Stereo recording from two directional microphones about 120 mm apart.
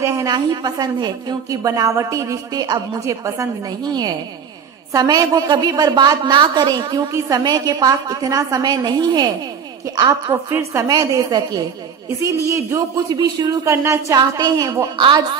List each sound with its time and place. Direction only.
0.3 s a woman's voice: 35° right (ahead or behind)
10.3 s a woman's voice: 20° right (ahead or behind)
15.0 s a woman's voice: 40° right (ahead or behind)